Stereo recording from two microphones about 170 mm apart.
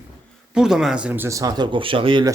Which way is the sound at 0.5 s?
5° right (ahead or behind).